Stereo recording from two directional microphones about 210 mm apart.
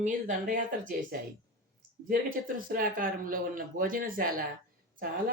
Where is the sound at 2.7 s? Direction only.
40° right (ahead or behind).